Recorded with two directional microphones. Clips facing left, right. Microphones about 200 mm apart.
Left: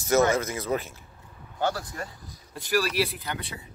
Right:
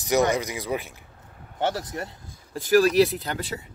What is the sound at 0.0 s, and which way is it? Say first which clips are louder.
Speech: even; 15° right (ahead or behind).